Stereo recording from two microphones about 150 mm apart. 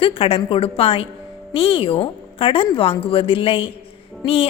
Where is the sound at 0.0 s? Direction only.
35° left (ahead or behind).